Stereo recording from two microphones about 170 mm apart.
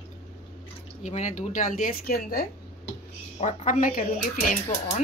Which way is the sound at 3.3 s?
45° left (ahead or behind).